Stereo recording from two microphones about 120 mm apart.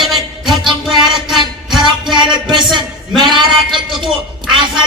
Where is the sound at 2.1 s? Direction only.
40° right (ahead or behind).